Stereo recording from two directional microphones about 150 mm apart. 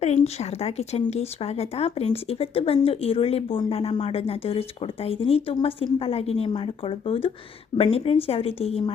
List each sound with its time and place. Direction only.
0.0 s speech: 45° left (ahead or behind)